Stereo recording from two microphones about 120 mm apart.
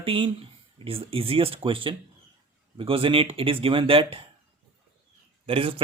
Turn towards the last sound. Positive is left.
turn(degrees=-50)  # may be behind; listen again after turning